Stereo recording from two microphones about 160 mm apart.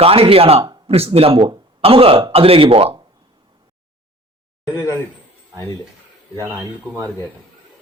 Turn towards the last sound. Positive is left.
turn(degrees=-20)  # may be behind; listen again after turning